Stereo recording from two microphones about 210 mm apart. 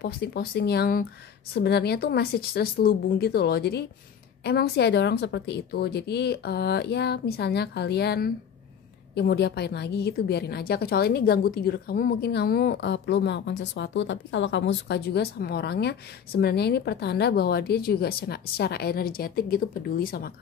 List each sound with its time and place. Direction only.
0.0 s a woman's voice: 50° left (ahead or behind)